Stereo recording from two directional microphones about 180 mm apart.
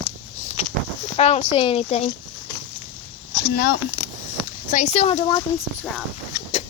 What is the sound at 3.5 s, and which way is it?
Speech, 55° left (ahead or behind).